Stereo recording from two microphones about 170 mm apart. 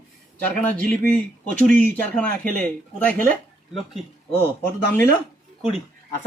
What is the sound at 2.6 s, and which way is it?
Speech, 10° left (ahead or behind).